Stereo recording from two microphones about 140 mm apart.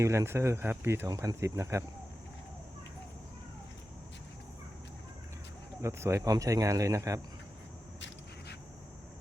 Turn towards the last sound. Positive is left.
turn(degrees=-25)  # may be behind; listen again after turning